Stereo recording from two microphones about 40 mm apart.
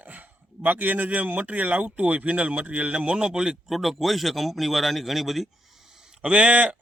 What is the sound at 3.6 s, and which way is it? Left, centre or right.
A man's voice, centre.